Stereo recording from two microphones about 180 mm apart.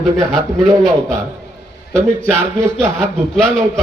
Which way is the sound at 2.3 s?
15° right (ahead or behind).